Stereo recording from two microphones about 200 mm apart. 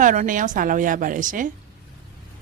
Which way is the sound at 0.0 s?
40° right (ahead or behind).